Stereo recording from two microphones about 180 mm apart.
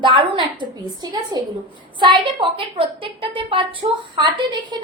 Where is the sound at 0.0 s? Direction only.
25° right (ahead or behind).